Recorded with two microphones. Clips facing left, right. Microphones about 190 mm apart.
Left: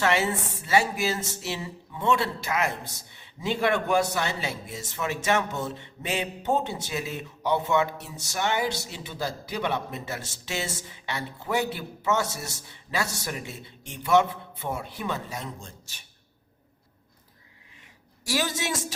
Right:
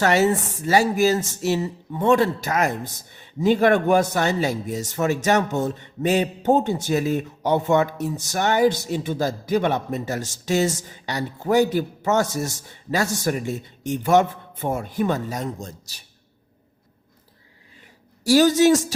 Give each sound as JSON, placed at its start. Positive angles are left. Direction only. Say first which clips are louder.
{"t": 0.0, "sound": "a man's voice", "louder": "right 6 dB", "side_deg": -40}
{"t": 18.3, "sound": "speech", "louder": "right 14 dB", "side_deg": -40}